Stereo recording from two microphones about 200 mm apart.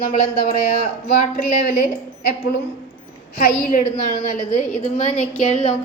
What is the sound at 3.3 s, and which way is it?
A woman's voice, 45° left (ahead or behind).